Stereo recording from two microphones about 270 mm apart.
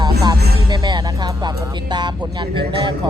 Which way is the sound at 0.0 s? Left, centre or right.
Centre.